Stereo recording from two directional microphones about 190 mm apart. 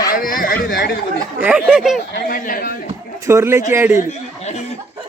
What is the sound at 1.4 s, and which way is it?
Speech, 5° right (ahead or behind).